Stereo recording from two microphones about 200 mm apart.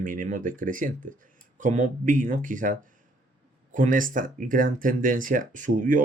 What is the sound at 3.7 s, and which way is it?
Speech, 40° right (ahead or behind).